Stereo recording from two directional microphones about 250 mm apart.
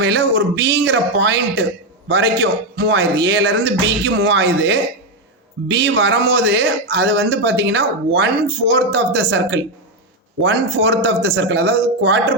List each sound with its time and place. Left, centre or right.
0.0 s speech: right